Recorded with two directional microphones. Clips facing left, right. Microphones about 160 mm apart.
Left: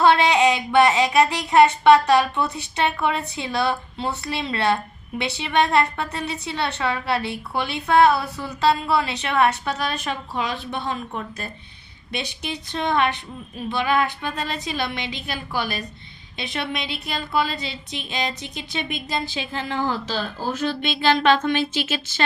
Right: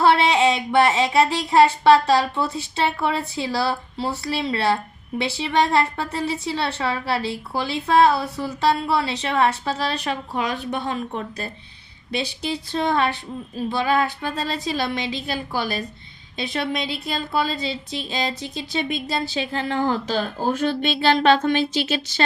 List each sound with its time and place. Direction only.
0.0 s a woman's voice: 25° right (ahead or behind)